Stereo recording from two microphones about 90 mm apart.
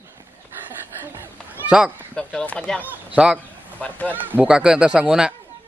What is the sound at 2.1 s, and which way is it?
Speech, 10° left (ahead or behind).